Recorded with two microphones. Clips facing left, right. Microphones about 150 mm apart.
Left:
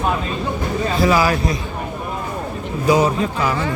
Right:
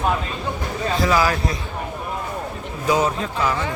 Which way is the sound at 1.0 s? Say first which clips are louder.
Left 3 dB; 10° left (ahead or behind).